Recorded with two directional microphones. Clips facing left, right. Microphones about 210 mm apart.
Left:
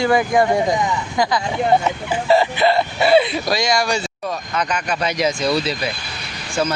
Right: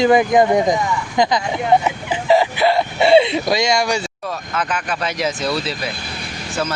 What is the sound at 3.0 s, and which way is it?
Speech, 25° right (ahead or behind).